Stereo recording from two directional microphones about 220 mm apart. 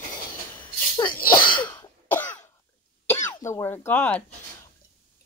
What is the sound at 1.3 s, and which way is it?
Cough, 20° left (ahead or behind).